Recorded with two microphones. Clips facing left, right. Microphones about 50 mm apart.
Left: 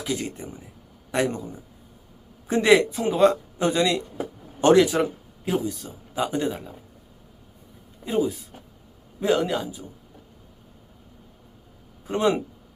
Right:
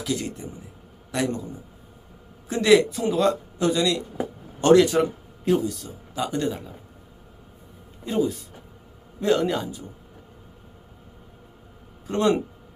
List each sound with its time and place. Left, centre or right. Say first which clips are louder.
0.0 s a man's voice: right 1 dB; left
2.5 s a man's voice: even; left
4.6 s speech: right 1 dB; centre
8.0 s a man's voice: even; centre
12.0 s speech: right 1 dB; centre